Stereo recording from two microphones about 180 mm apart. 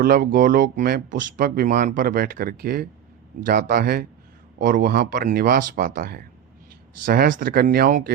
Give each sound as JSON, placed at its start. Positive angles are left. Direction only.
{"t": 0.0, "sound": "speech", "side_deg": -55}